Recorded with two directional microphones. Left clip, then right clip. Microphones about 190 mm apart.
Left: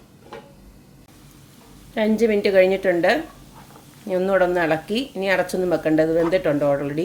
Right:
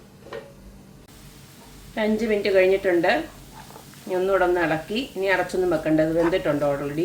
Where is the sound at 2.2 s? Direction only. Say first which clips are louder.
Left 3 dB; 55° left (ahead or behind).